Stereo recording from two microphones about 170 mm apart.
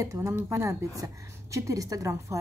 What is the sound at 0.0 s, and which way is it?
A woman's voice, 20° right (ahead or behind).